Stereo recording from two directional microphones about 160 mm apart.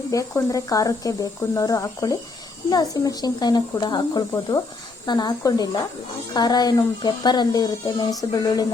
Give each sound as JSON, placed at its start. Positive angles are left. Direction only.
{"t": 0.1, "sound": "speech", "side_deg": 20}